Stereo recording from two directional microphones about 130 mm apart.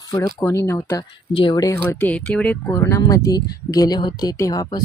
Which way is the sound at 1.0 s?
35° left (ahead or behind).